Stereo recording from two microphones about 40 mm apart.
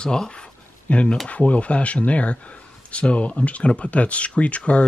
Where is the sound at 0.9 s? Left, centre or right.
Left.